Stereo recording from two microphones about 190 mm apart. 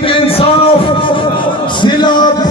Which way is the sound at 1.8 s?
25° left (ahead or behind).